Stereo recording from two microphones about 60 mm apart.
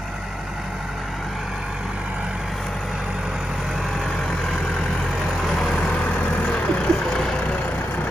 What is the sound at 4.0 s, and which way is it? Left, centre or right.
Vehicle, centre.